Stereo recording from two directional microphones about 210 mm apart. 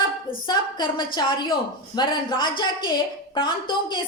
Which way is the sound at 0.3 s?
20° left (ahead or behind).